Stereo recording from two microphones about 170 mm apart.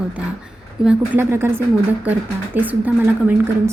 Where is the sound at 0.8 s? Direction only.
10° right (ahead or behind).